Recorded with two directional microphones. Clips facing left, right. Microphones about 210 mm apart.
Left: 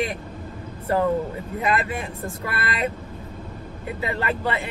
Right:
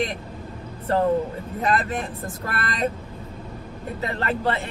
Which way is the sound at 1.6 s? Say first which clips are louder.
Right 1 dB; 10° left (ahead or behind).